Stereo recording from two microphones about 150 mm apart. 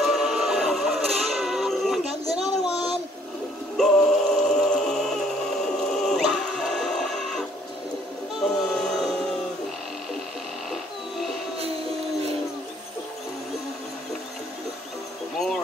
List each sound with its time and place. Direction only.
0.0 s music: centre (ahead or behind)
2.2 s a sound: 40° right (ahead or behind)
3.7 s music: 5° left (ahead or behind)
8.5 s music: 5° left (ahead or behind)
10.7 s a sound: centre (ahead or behind)
15.3 s insect: centre (ahead or behind)